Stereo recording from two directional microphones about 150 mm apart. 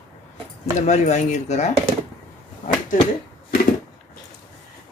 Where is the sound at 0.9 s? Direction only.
50° left (ahead or behind).